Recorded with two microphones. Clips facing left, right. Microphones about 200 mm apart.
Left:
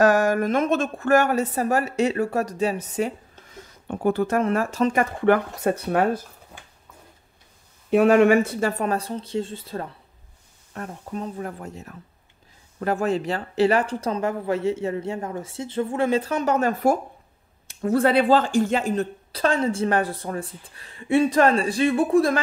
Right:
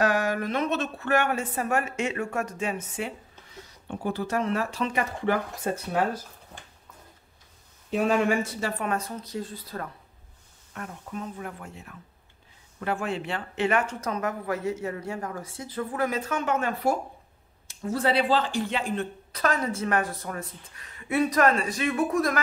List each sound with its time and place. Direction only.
0.0 s speech: 45° left (ahead or behind)
3.6 s speech: 55° left (ahead or behind)
7.9 s speech: 65° left (ahead or behind); by 8.8 s 50° left (ahead or behind)
8.8 s speech: 30° left (ahead or behind)
17.6 s speech: 55° left (ahead or behind); by 22.4 s 30° left (ahead or behind)